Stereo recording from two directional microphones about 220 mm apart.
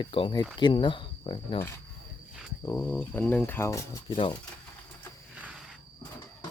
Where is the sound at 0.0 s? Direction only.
25° left (ahead or behind).